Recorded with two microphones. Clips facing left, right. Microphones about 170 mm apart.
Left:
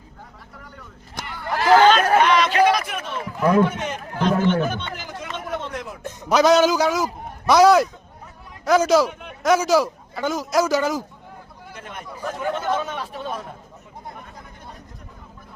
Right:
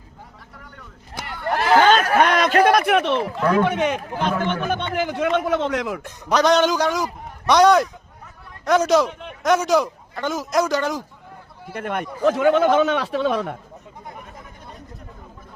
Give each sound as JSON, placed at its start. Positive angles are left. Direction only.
{"t": 0.6, "sound": "vehicle", "side_deg": 0}
{"t": 2.2, "sound": "a sound", "side_deg": -50}
{"t": 3.6, "sound": "speech", "side_deg": -70}
{"t": 4.9, "sound": "a sound", "side_deg": -65}
{"t": 6.2, "sound": "a man's voice", "side_deg": 5}
{"t": 11.7, "sound": "a man's voice", "side_deg": -60}